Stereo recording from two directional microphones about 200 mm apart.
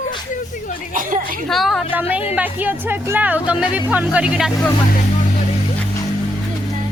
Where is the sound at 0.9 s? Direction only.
40° right (ahead or behind).